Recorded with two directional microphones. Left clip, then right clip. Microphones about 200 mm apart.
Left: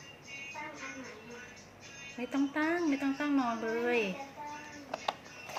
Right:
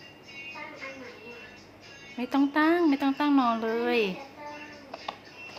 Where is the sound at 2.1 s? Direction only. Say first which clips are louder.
Right 8 dB; 30° right (ahead or behind).